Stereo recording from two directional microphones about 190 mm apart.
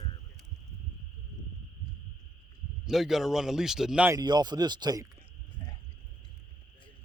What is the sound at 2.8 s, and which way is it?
A man's voice, centre (ahead or behind).